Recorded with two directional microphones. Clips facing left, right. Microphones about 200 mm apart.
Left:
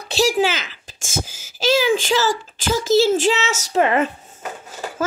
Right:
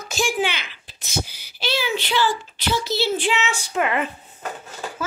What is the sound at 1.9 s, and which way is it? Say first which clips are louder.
Speech: left 3 dB; 45° left (ahead or behind).